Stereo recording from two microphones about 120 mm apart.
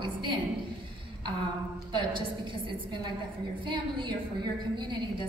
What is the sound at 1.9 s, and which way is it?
A woman's voice, 45° right (ahead or behind).